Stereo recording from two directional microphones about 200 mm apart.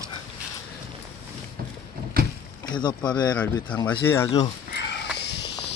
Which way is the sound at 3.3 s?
5° left (ahead or behind).